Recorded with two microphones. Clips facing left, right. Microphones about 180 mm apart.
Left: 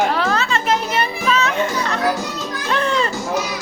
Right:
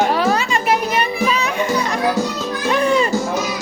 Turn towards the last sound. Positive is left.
turn(degrees=-10)  # may be behind; listen again after turning